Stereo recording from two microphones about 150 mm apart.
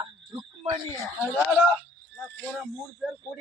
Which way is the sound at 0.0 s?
30° right (ahead or behind).